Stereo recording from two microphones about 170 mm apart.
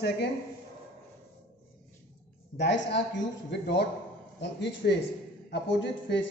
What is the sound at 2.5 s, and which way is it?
A man's voice, 90° left.